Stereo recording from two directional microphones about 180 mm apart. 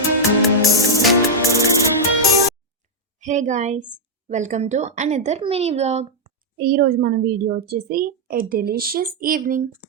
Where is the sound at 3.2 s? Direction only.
45° right (ahead or behind).